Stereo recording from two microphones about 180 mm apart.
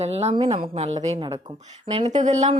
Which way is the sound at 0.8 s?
40° right (ahead or behind).